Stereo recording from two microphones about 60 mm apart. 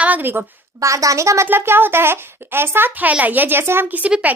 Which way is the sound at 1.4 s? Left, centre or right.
Right.